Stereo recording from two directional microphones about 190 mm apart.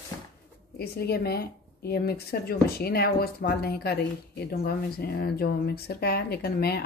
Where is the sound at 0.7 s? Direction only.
55° left (ahead or behind).